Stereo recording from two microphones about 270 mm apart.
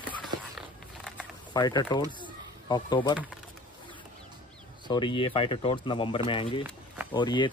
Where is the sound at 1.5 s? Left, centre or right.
Centre.